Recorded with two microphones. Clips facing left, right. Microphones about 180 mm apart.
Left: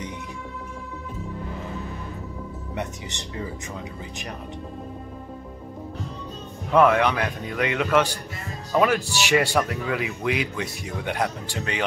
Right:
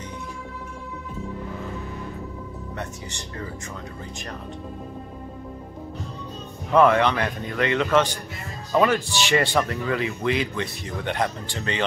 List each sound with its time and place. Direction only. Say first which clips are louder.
2.7 s speech: left 4 dB; 20° left (ahead or behind)
6.7 s speech: right 1 dB; 5° left (ahead or behind)